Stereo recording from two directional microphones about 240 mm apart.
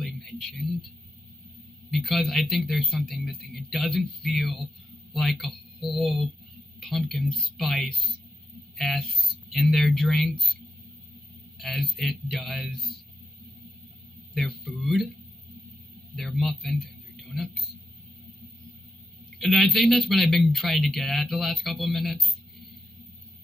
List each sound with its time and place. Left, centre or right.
0.0 s a sound: centre
1.9 s a man's voice: centre
9.1 s a sound: left
9.5 s a man's voice: centre
14.3 s a man's voice: centre
16.2 s a man's voice: centre
19.3 s a man's voice: centre